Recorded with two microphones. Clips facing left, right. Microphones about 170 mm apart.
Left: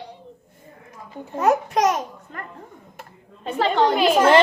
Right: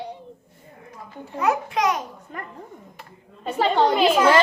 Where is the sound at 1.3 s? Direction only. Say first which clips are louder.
Left 3 dB; 45° left (ahead or behind).